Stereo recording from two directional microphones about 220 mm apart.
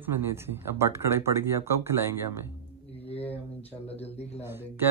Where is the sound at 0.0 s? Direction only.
10° right (ahead or behind).